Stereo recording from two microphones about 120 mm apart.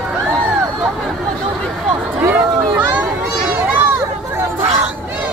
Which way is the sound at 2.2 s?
15° right (ahead or behind).